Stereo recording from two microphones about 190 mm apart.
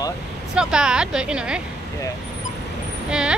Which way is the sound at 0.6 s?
5° right (ahead or behind).